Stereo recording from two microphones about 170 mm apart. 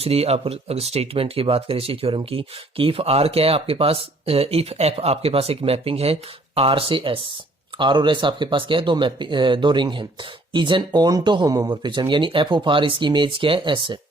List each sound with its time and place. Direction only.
0.0 s speech: 35° right (ahead or behind)